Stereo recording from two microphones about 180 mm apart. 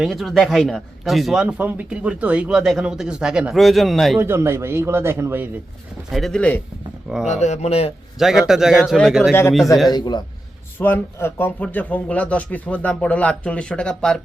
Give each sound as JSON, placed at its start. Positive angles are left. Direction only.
{"t": 0.0, "sound": "speech", "side_deg": 0}
{"t": 4.2, "sound": "speech", "side_deg": -15}
{"t": 6.1, "sound": "speech", "side_deg": 0}
{"t": 7.3, "sound": "speech", "side_deg": 40}
{"t": 8.2, "sound": "speech", "side_deg": 0}
{"t": 9.9, "sound": "a man's voice", "side_deg": 25}
{"t": 10.8, "sound": "speech", "side_deg": 10}